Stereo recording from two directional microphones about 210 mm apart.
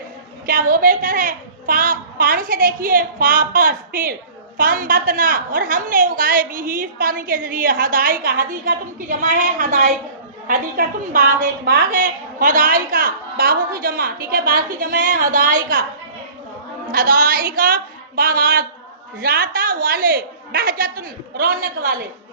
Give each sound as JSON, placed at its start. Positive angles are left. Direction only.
{"t": 0.4, "sound": "a woman's voice", "side_deg": -40}
{"t": 16.9, "sound": "a woman's voice", "side_deg": -45}